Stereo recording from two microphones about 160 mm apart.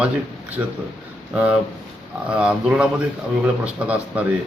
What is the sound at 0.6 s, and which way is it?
A man's voice, 10° right (ahead or behind).